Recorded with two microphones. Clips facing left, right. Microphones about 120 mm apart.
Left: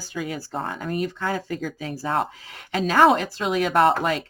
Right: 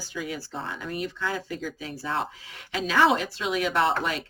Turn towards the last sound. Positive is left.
turn(degrees=45)  # may be behind; listen again after turning